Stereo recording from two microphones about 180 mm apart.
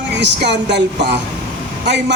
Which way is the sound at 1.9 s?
75° right (ahead or behind).